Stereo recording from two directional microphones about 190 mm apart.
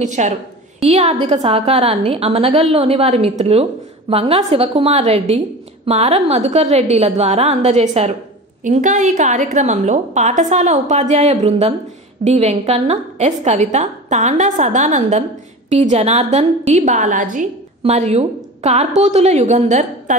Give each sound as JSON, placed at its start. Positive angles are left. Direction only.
{"t": 0.0, "sound": "a woman's voice", "side_deg": -40}